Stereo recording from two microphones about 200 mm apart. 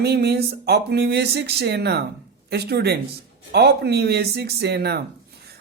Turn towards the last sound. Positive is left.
turn(degrees=-55)  # may be behind; listen again after turning